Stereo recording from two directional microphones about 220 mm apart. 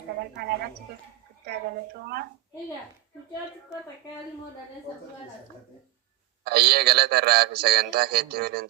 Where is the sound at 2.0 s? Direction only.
45° right (ahead or behind).